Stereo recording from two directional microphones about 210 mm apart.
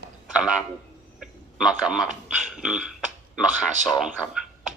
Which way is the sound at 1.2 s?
5° right (ahead or behind).